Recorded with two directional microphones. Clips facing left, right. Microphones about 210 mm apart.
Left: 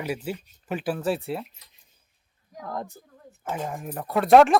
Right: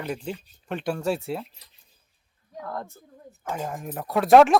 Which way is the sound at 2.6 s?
15° left (ahead or behind).